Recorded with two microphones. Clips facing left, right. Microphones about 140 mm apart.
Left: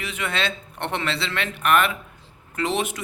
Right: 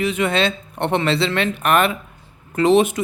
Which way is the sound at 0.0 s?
25° right (ahead or behind).